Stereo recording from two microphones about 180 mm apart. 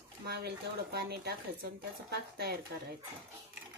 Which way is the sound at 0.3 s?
65° right (ahead or behind).